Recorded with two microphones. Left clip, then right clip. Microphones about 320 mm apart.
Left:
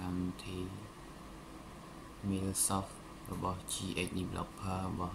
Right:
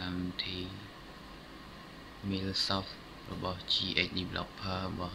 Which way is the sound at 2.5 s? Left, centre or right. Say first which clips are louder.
Right 5 dB; centre.